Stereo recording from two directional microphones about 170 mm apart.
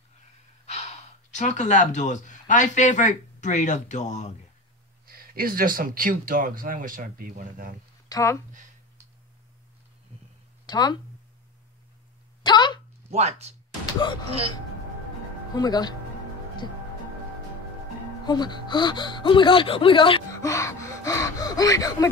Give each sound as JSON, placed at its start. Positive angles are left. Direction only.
{"t": 0.7, "sound": "speech", "side_deg": 40}
{"t": 5.0, "sound": "speech", "side_deg": -60}
{"t": 8.1, "sound": "speech", "side_deg": 15}
{"t": 10.7, "sound": "speech", "side_deg": 25}
{"t": 12.4, "sound": "a sound", "side_deg": 25}
{"t": 13.1, "sound": "speech", "side_deg": -40}
{"t": 15.5, "sound": "speech", "side_deg": 25}
{"t": 18.2, "sound": "speech", "side_deg": 25}
{"t": 20.4, "sound": "speech", "side_deg": 20}